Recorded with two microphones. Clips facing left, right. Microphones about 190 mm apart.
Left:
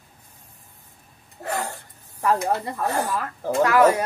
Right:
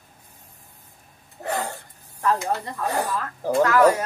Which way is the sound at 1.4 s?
20° right (ahead or behind).